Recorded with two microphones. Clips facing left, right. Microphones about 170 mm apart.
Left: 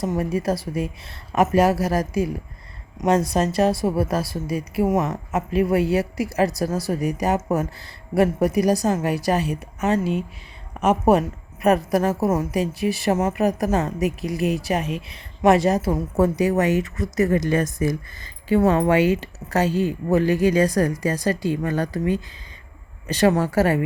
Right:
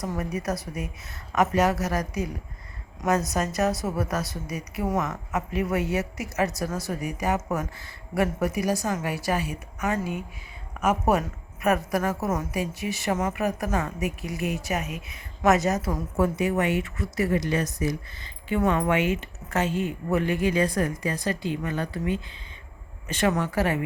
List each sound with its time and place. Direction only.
0.0 s a woman's voice: 25° left (ahead or behind)
3.0 s a woman's voice: 30° left (ahead or behind)
10.0 s speech: 80° left
10.8 s a woman's voice: 30° left (ahead or behind)